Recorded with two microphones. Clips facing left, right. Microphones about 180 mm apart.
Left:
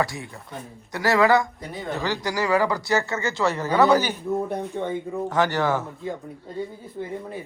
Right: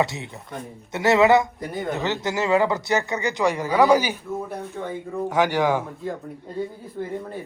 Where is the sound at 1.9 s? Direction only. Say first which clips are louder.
Even; 20° right (ahead or behind).